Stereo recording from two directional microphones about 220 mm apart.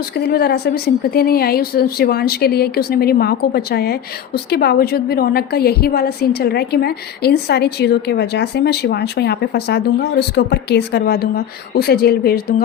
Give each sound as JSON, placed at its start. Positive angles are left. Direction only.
{"t": 0.2, "sound": "a woman's voice", "side_deg": 45}